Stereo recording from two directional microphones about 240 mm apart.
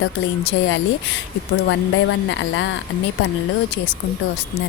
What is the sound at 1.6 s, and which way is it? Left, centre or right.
Speech, left.